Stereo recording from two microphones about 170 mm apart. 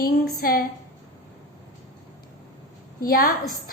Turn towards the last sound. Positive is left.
turn(degrees=60)  # may be behind; listen again after turning